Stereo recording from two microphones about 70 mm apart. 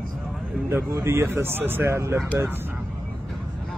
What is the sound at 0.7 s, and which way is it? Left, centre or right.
Speech, right.